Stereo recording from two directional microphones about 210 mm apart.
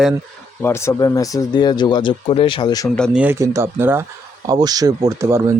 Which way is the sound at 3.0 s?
5° right (ahead or behind).